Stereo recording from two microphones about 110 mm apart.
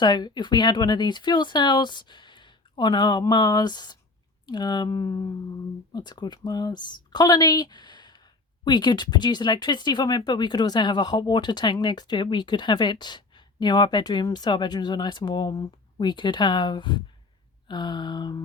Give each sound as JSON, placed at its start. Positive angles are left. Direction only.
{"t": 0.0, "sound": "speech", "side_deg": 40}